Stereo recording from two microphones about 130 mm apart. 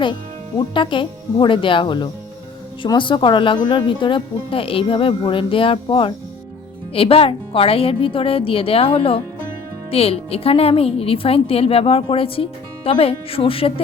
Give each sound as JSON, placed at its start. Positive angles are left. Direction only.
{"t": 0.7, "sound": "a woman's voice", "side_deg": 40}